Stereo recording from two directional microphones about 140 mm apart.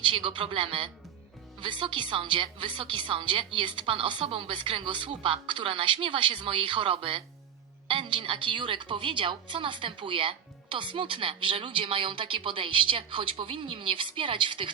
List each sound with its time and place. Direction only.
0.0 s a woman's voice: 35° right (ahead or behind)